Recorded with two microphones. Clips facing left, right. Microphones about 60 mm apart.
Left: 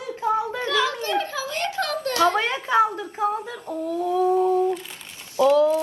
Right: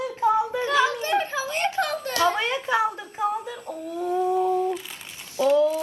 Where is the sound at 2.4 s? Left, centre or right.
Left.